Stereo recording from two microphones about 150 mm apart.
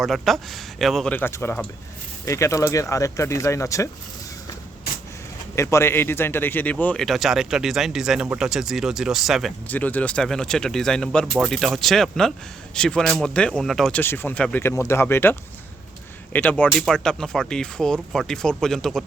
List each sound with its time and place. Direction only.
0.0 s speech: centre (ahead or behind); by 3.8 s 20° left (ahead or behind)
5.5 s speech: 15° left (ahead or behind); by 9.5 s centre (ahead or behind)
9.6 s speech: 10° left (ahead or behind)